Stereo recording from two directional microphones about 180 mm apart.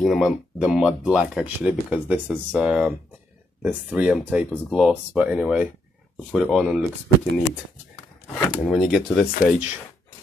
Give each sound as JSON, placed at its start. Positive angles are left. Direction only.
{"t": 0.0, "sound": "speech", "side_deg": 0}
{"t": 8.6, "sound": "speech", "side_deg": 5}
{"t": 9.3, "sound": "speech", "side_deg": 40}